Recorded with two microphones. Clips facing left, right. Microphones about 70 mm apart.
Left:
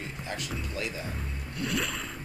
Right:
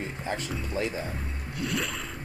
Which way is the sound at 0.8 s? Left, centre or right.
Right.